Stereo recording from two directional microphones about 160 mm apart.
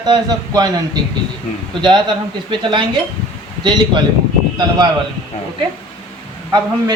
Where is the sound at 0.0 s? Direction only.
25° right (ahead or behind).